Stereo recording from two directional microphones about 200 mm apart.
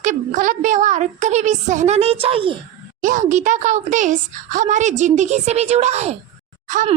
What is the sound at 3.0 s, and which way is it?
Speech, 40° right (ahead or behind).